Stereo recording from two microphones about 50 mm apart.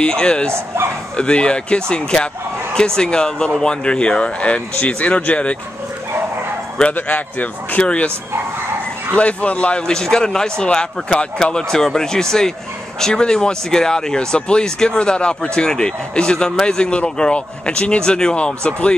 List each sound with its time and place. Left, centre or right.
0.0 s speech: centre
6.9 s speech: left
9.1 s speech: left